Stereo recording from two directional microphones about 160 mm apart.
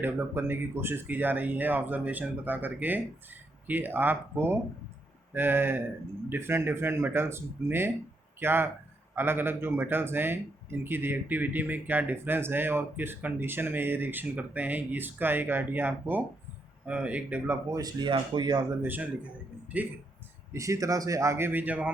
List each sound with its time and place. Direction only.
0.0 s a man's voice: 15° right (ahead or behind)
17.7 s a man's voice: 25° right (ahead or behind)
18.8 s a man's voice: 10° right (ahead or behind)